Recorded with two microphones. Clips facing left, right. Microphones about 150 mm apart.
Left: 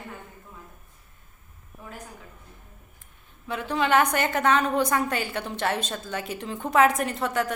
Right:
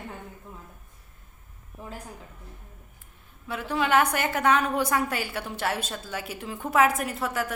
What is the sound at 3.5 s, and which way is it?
A woman's voice, 5° right (ahead or behind).